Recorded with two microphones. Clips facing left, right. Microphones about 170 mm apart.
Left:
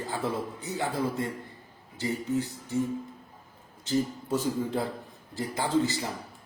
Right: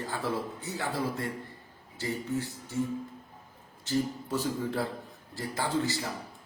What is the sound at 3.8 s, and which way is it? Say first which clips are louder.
A man's voice: left 2 dB; 20° left (ahead or behind).